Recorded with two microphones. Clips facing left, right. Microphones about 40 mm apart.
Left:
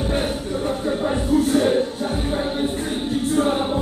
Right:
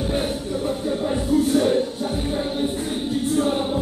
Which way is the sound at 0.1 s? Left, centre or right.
Centre.